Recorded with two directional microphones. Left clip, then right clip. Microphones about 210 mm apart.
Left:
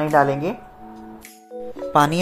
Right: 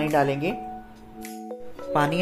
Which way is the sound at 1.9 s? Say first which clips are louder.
Left 6 dB; 20° left (ahead or behind).